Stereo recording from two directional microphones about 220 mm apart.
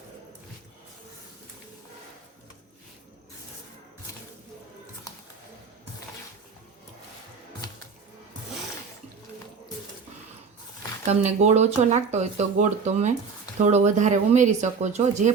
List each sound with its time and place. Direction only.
11.0 s speech: 30° right (ahead or behind)